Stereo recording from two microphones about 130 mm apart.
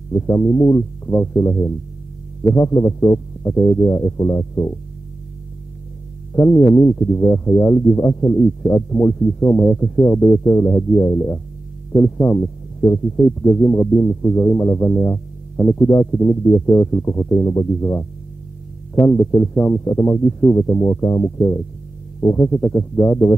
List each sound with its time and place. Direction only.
0.1 s speech: 20° left (ahead or behind)
6.3 s speech: 20° left (ahead or behind)
20.2 s speech: 10° left (ahead or behind)